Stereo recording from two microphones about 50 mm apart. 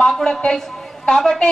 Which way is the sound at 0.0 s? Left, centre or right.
Centre.